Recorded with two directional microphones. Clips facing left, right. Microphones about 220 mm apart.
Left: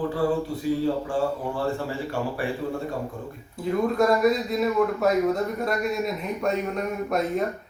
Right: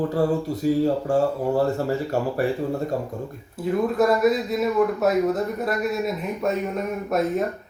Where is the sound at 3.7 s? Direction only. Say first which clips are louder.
Right 1 dB; 5° right (ahead or behind).